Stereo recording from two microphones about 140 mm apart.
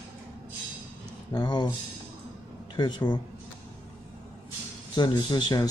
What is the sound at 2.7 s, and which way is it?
Speech, 30° left (ahead or behind).